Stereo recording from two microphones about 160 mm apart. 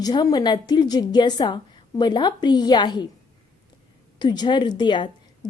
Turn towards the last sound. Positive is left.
turn(degrees=30)  # may be behind; listen again after turning